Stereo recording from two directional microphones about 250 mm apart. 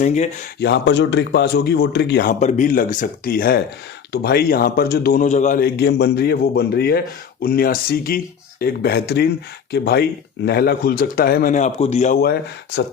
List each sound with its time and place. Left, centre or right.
0.0 s speech: left
0.6 s speech: left
2.4 s speech: left